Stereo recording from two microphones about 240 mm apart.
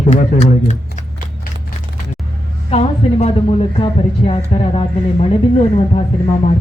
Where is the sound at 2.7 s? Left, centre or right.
Left.